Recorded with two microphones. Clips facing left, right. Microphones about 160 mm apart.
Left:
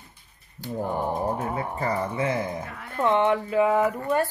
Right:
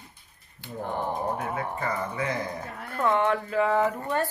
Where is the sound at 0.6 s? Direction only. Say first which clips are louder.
Left 8 dB; 40° left (ahead or behind).